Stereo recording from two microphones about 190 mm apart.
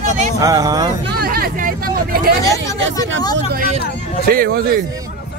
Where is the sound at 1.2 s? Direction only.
50° right (ahead or behind).